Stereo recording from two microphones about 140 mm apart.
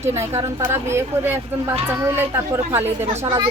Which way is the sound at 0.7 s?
20° right (ahead or behind).